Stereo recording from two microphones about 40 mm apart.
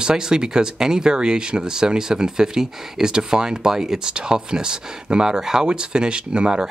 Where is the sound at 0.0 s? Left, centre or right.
Centre.